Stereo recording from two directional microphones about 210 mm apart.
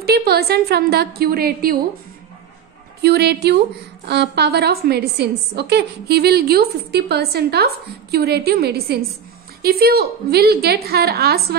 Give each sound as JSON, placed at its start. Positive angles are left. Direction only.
{"t": 0.0, "sound": "a woman's voice", "side_deg": -50}
{"t": 3.0, "sound": "a woman's voice", "side_deg": -50}